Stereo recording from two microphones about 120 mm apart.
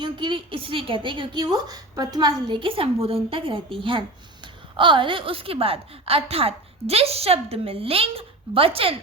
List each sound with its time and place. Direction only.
0.0 s a woman's voice: 40° right (ahead or behind)